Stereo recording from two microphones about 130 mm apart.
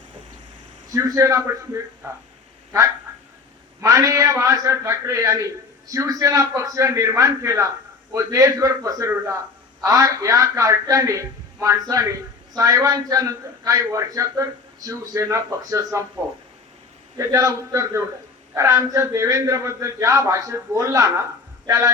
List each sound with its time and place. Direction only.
0.9 s a man's voice: 25° right (ahead or behind)
3.8 s a man's voice: 25° right (ahead or behind)
17.2 s a man's voice: 25° right (ahead or behind)